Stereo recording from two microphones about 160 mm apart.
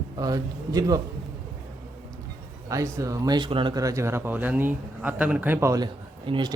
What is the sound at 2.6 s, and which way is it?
Speech, 20° right (ahead or behind).